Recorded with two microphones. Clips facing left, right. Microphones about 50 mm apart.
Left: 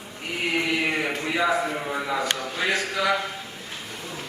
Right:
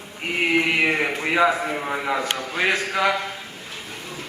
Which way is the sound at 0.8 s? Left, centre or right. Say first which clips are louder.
Right 4 dB; right.